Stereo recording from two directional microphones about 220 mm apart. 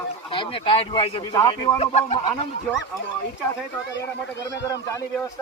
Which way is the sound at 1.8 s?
30° left (ahead or behind).